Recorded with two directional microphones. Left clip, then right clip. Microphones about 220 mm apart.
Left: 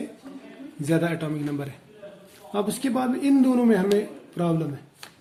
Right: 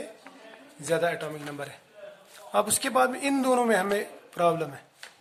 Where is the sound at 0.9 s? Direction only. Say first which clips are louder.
Left 1 dB; 10° right (ahead or behind).